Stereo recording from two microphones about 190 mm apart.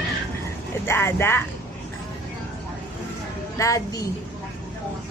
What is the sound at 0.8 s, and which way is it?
Speech, 15° left (ahead or behind).